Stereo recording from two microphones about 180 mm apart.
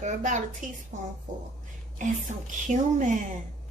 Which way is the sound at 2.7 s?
45° right (ahead or behind).